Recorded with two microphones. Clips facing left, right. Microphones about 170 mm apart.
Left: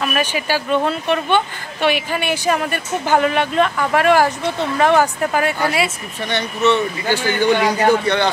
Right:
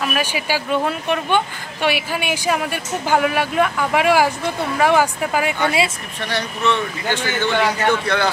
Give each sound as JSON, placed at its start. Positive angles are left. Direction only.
{"t": 0.0, "sound": "speech", "side_deg": -10}
{"t": 6.2, "sound": "speech", "side_deg": 0}
{"t": 7.8, "sound": "a man's voice", "side_deg": 25}